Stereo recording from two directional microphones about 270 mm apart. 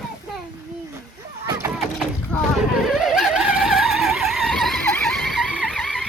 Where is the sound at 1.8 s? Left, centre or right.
Centre.